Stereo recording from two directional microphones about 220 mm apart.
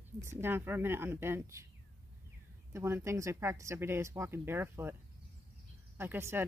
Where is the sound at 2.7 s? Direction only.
10° right (ahead or behind).